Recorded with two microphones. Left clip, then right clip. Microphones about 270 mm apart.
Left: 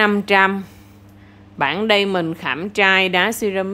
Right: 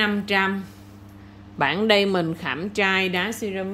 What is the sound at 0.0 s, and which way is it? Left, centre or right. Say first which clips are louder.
A woman's voice: left 7 dB; centre.